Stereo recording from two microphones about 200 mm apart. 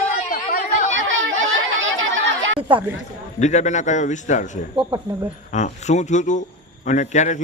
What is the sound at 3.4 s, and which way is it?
A man's voice, 35° left (ahead or behind).